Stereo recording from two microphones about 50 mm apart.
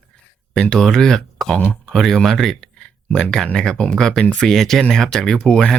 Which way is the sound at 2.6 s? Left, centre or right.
Centre.